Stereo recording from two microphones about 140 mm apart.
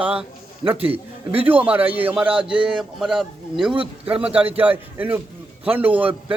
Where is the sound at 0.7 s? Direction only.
45° right (ahead or behind).